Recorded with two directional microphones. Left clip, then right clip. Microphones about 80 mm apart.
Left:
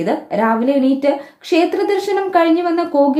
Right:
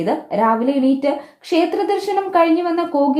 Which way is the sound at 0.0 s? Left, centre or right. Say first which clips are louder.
Even; right.